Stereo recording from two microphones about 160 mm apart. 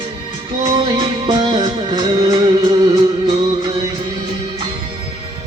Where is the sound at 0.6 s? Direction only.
30° right (ahead or behind).